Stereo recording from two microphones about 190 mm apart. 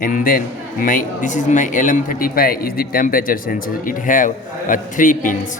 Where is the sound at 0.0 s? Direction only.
50° left (ahead or behind).